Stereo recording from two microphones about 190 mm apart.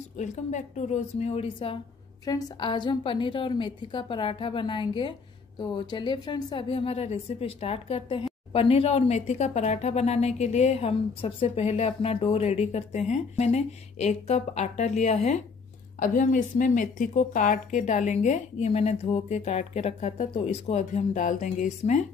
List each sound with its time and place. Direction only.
0.2 s a woman's voice: 40° left (ahead or behind)